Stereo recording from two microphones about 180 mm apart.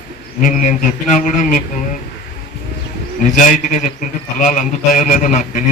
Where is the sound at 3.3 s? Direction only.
45° left (ahead or behind).